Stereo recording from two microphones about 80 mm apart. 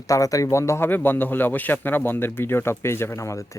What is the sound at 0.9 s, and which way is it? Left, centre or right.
Speech, left.